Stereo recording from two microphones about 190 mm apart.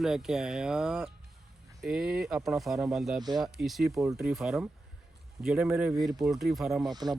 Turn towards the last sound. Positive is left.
turn(degrees=-20)  # may be behind; listen again after turning